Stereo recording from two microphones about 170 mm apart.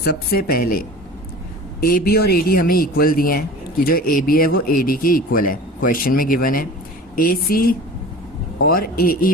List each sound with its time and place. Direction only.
0.0 s a man's voice: 65° left (ahead or behind)